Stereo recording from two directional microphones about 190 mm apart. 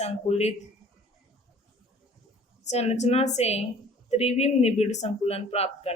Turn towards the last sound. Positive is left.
turn(degrees=30)  # may be behind; listen again after turning